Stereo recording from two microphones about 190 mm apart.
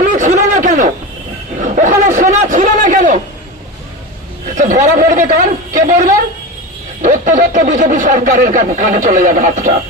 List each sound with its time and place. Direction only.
0.0 s a sound: 45° right (ahead or behind)
4.5 s speech: 40° right (ahead or behind)
7.0 s speech: 45° right (ahead or behind)